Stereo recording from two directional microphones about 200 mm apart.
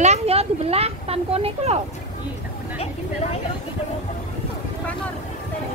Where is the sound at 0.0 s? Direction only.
30° right (ahead or behind).